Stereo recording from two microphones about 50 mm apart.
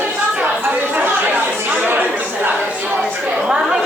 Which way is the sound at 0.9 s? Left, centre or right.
Right.